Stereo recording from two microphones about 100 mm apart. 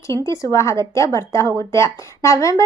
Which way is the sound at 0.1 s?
30° left (ahead or behind).